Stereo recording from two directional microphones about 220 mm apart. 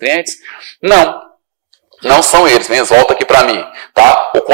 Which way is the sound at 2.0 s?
15° right (ahead or behind).